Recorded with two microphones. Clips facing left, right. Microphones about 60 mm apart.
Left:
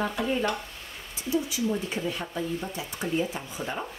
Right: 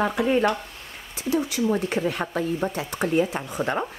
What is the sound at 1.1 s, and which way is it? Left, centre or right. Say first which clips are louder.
Speech: right 4 dB; right.